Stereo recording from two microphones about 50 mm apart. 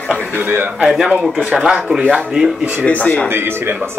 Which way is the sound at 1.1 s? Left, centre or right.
Right.